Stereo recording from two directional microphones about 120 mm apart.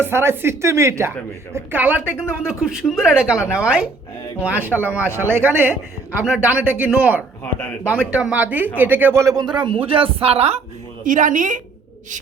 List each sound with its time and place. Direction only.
0.0 s speech: 20° right (ahead or behind)
2.0 s speech: 20° left (ahead or behind)
2.5 s speech: 5° right (ahead or behind)
5.0 s speech: 20° left (ahead or behind)
6.2 s speech: 15° right (ahead or behind); by 10.6 s 60° right (ahead or behind)
11.0 s a woman's voice: 90° right